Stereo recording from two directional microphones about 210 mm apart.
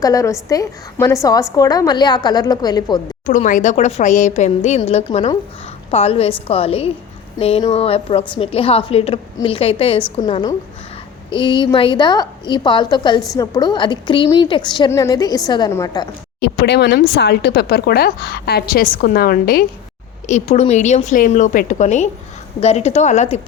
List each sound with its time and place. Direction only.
0.0 s a woman's voice: 15° left (ahead or behind)
3.2 s a woman's voice: 35° left (ahead or behind); by 16.0 s 15° left (ahead or behind)
16.4 s speech: 55° left (ahead or behind)
20.2 s a woman's voice: 35° left (ahead or behind)